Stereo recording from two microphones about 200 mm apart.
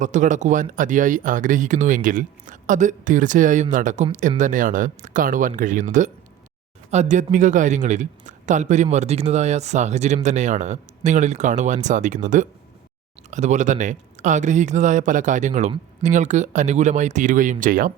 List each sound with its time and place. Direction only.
0.0 s speech: 40° right (ahead or behind)
6.9 s speech: 35° right (ahead or behind)